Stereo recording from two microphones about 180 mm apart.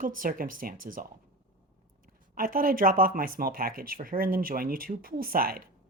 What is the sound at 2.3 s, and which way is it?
Speech, 50° right (ahead or behind).